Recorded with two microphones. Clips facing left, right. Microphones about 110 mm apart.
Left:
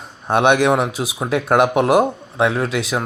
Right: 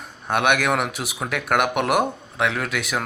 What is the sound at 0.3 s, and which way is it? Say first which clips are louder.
Speech: left 6 dB; 25° left (ahead or behind).